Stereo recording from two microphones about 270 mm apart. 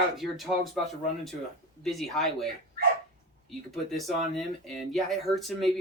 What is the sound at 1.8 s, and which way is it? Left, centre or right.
Speech, centre.